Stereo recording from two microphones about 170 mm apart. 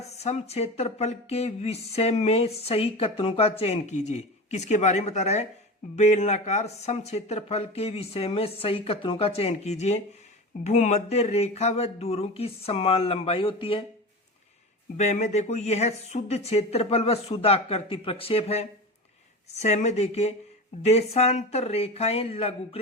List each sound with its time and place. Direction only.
0.1 s speech: 40° left (ahead or behind)
14.9 s speech: 40° left (ahead or behind)